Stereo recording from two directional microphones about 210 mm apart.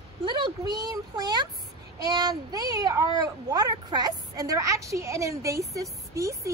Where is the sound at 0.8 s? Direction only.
20° right (ahead or behind).